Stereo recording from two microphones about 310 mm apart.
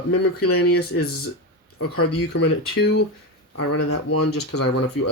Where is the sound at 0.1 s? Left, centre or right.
Left.